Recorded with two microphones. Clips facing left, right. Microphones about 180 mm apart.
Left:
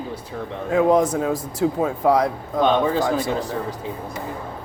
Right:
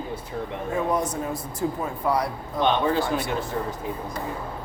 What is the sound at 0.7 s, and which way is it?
A man's voice, 90° left.